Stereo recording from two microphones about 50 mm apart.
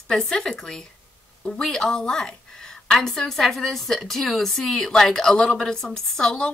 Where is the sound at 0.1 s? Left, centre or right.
Centre.